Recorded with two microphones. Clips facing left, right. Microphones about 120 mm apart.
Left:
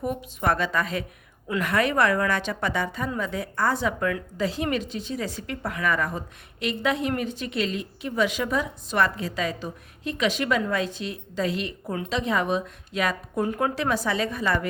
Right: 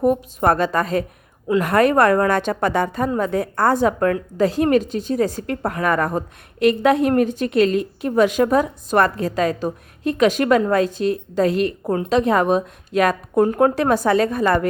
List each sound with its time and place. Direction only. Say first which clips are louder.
0.0 s a woman's voice: right 9 dB; 40° right (ahead or behind)